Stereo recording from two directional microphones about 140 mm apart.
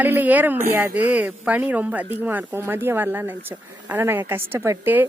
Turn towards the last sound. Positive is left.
turn(degrees=-15)  # may be behind; listen again after turning